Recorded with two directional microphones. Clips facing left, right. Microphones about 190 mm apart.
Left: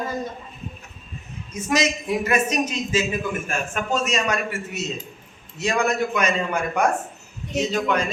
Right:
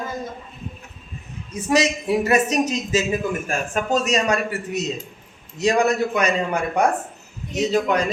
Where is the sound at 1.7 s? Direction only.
35° right (ahead or behind).